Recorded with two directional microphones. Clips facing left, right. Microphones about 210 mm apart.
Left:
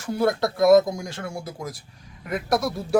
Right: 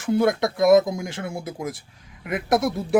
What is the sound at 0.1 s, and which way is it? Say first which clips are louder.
Speech: right 2 dB; 20° right (ahead or behind).